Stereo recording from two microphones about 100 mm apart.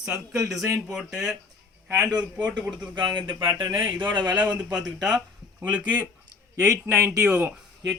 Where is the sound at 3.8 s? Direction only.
20° right (ahead or behind).